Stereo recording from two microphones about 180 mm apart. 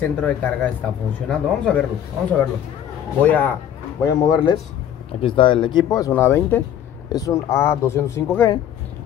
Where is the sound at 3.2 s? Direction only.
10° left (ahead or behind).